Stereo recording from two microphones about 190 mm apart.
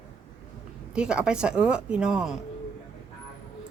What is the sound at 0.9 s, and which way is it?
A woman's voice, 5° right (ahead or behind).